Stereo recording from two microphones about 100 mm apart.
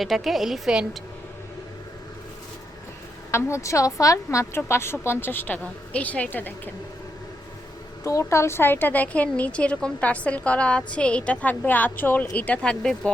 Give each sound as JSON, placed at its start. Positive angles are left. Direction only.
{"t": 0.0, "sound": "a woman's voice", "side_deg": 0}
{"t": 3.3, "sound": "a woman's voice", "side_deg": 30}
{"t": 8.0, "sound": "a woman's voice", "side_deg": 30}